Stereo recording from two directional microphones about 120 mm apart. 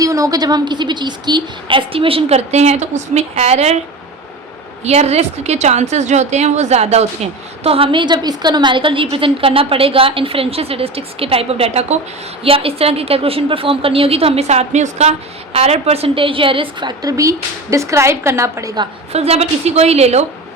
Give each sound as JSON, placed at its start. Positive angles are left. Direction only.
{"t": 0.0, "sound": "a woman's voice", "side_deg": -30}
{"t": 4.8, "sound": "a woman's voice", "side_deg": -65}
{"t": 7.6, "sound": "a woman's voice", "side_deg": -55}
{"t": 15.5, "sound": "a woman's voice", "side_deg": -60}
{"t": 17.0, "sound": "a woman's voice", "side_deg": -30}
{"t": 19.1, "sound": "a woman's voice", "side_deg": -60}